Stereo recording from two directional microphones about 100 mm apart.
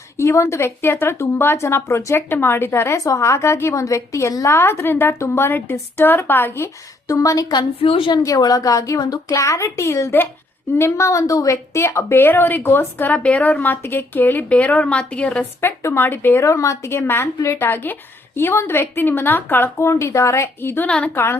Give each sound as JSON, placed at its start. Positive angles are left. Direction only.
{"t": 0.2, "sound": "speech", "side_deg": 30}
{"t": 7.1, "sound": "a woman's voice", "side_deg": 35}
{"t": 7.8, "sound": "a woman's voice", "side_deg": 65}
{"t": 8.1, "sound": "a woman's voice", "side_deg": 35}
{"t": 15.8, "sound": "speech", "side_deg": 25}